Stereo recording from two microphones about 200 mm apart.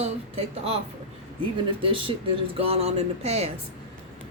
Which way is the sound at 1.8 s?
25° right (ahead or behind).